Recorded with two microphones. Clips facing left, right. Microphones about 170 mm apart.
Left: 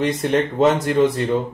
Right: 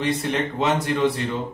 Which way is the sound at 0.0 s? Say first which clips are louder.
Left 5 dB; 45° left (ahead or behind).